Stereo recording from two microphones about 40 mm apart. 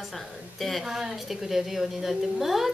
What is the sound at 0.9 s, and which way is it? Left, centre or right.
A woman's voice, centre.